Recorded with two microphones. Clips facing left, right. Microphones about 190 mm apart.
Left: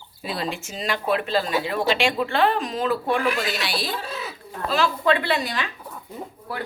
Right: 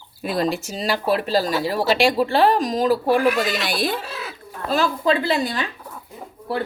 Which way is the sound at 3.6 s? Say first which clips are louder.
Right 5 dB; 50° right (ahead or behind).